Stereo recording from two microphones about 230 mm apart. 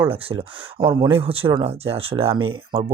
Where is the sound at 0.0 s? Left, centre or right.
Right.